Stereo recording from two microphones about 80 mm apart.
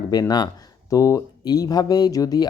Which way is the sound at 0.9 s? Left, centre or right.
Left.